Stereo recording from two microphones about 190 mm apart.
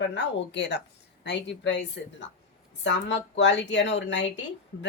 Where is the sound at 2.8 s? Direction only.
70° left (ahead or behind).